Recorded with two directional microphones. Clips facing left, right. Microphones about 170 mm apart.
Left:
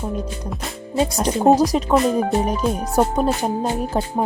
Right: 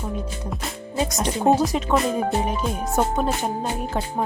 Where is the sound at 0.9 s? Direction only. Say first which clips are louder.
Left 5 dB; 30° left (ahead or behind).